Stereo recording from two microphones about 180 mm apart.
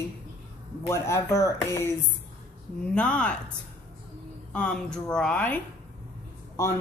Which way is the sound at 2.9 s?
5° left (ahead or behind).